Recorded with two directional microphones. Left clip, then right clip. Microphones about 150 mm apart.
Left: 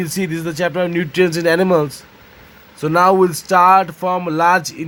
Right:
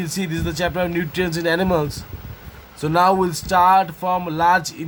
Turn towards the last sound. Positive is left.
turn(degrees=30)  # may be behind; listen again after turning